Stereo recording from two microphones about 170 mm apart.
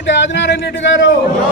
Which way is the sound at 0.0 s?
90° left.